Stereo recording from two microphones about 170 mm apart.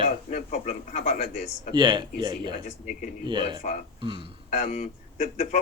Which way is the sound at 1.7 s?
25° right (ahead or behind).